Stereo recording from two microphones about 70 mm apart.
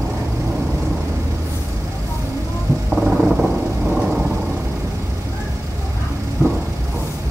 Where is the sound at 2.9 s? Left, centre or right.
Right.